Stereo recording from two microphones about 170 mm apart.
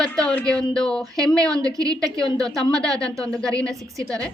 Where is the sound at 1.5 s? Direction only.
20° right (ahead or behind).